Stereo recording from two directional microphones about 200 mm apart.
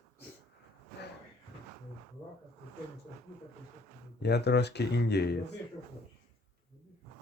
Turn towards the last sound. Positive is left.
turn(degrees=55)  # may be behind; listen again after turning